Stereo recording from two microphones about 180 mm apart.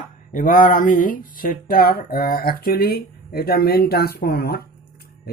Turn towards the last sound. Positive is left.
turn(degrees=60)  # may be behind; listen again after turning